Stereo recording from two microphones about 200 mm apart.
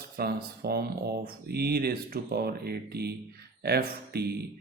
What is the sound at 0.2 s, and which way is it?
Speech, 50° right (ahead or behind).